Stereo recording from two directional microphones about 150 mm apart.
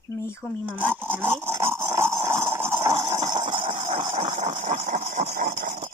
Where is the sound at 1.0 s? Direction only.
15° right (ahead or behind); by 5.8 s 55° right (ahead or behind).